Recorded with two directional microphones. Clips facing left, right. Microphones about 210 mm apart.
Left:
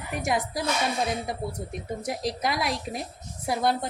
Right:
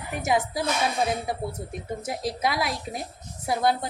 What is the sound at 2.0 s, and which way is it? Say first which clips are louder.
A woman's voice: right 1 dB; centre (ahead or behind).